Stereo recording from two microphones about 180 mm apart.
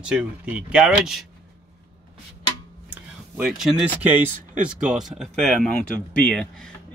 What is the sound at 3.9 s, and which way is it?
Speech, 10° right (ahead or behind).